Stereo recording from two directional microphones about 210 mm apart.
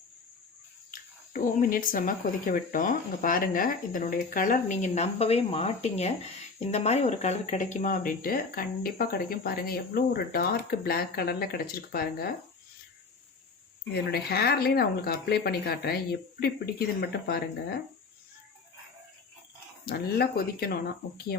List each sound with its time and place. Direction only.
0.9 s speech: 40° left (ahead or behind)
13.9 s speech: 50° left (ahead or behind)
19.8 s speech: 45° left (ahead or behind)